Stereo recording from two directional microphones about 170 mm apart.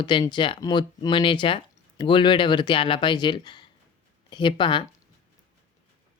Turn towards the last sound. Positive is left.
turn(degrees=30)  # may be behind; listen again after turning